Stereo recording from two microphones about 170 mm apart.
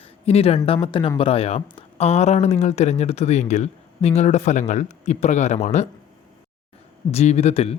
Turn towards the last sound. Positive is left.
turn(degrees=35)  # may be behind; listen again after turning